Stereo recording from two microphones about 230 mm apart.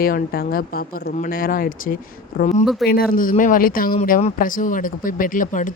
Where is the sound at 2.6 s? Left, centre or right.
Centre.